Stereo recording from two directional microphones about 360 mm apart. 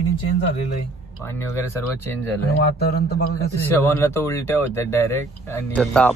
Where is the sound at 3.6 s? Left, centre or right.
Centre.